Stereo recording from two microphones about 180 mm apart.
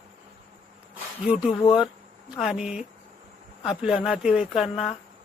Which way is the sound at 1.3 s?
5° right (ahead or behind).